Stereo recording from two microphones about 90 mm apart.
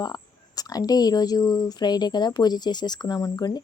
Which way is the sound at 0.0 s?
45° left (ahead or behind).